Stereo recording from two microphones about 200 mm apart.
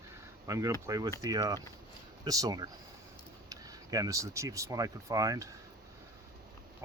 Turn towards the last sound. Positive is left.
turn(degrees=-15)  # may be behind; listen again after turning